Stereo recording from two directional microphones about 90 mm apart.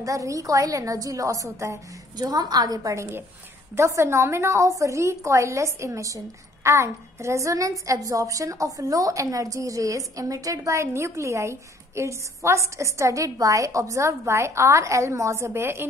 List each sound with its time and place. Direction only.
0.0 s a woman's voice: 35° right (ahead or behind)